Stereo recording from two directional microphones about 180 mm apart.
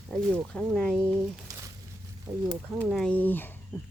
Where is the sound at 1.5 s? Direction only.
20° right (ahead or behind).